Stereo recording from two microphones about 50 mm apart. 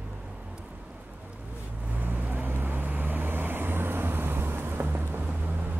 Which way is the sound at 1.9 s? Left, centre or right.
Right.